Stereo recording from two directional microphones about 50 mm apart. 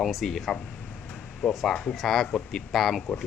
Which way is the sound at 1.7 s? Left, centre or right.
Centre.